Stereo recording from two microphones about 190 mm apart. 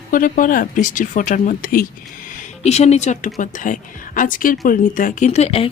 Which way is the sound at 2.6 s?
35° left (ahead or behind).